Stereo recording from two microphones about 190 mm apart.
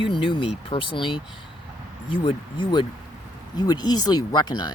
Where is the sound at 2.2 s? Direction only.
25° left (ahead or behind).